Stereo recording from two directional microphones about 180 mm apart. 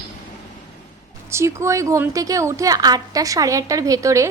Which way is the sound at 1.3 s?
15° right (ahead or behind).